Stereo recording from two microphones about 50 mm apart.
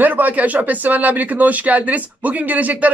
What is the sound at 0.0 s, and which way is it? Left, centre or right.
Speech, right.